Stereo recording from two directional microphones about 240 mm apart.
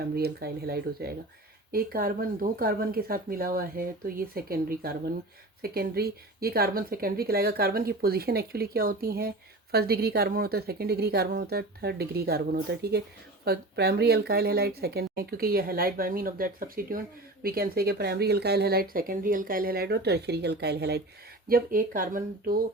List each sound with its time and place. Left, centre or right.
0.1 s speech: right